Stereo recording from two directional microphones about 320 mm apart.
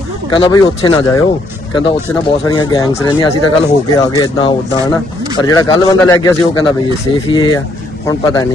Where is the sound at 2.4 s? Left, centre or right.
Centre.